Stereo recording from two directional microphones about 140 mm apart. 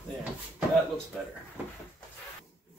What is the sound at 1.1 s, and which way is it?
Speech, 10° left (ahead or behind).